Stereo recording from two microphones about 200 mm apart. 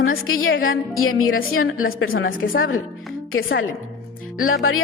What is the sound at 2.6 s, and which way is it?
A woman's voice, 90° left.